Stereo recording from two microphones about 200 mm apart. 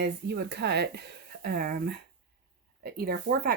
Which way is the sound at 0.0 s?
55° right (ahead or behind).